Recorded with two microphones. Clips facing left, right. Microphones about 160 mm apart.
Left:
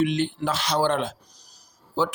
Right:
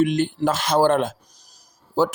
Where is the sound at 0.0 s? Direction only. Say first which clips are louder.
Right 4 dB; 45° right (ahead or behind).